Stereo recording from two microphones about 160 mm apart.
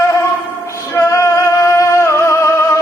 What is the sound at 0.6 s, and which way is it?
Music, 20° left (ahead or behind).